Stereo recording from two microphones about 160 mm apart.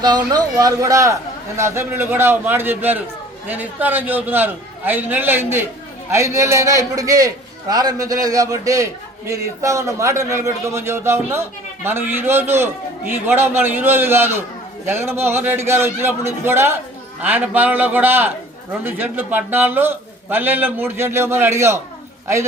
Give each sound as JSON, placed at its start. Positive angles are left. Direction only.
{"t": 0.0, "sound": "a man's voice", "side_deg": -25}